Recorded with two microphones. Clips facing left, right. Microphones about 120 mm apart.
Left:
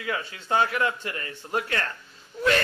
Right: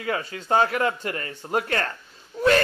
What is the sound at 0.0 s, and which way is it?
A man's voice, 40° right (ahead or behind).